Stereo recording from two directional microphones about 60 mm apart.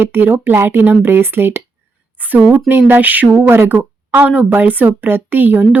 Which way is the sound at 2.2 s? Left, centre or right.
Right.